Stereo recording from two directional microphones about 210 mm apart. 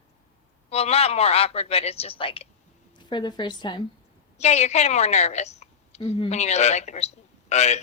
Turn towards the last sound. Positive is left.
turn(degrees=35)  # may be behind; listen again after turning